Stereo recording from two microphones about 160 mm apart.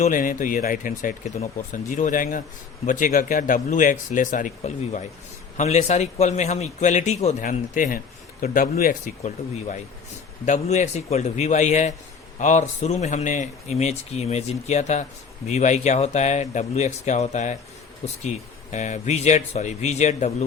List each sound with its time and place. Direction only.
0.0 s speech: 55° left (ahead or behind)